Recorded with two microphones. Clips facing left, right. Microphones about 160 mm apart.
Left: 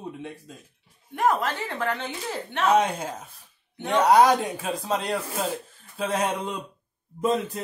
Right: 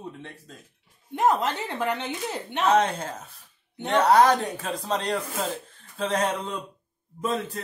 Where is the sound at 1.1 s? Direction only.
20° right (ahead or behind).